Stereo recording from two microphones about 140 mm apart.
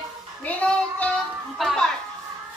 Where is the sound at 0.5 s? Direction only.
10° left (ahead or behind).